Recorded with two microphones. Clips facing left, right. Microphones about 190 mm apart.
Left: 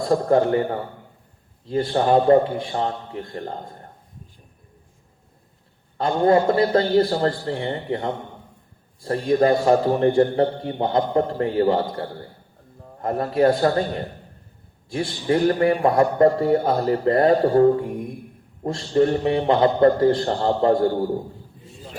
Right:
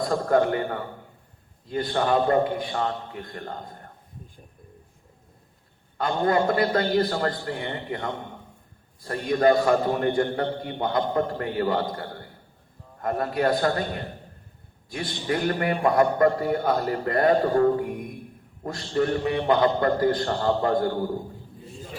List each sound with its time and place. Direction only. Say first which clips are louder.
0.1 s a man's voice: left 5 dB; 30° left (ahead or behind)
6.0 s a man's voice: left 5 dB; 25° left (ahead or behind)
14.8 s a man's voice: left 6 dB; 30° left (ahead or behind)